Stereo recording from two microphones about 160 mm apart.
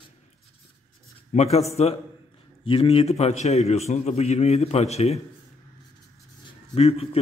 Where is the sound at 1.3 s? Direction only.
45° left (ahead or behind).